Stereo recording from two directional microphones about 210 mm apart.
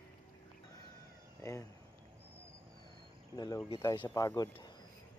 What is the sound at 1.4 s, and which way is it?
Speech, 15° left (ahead or behind).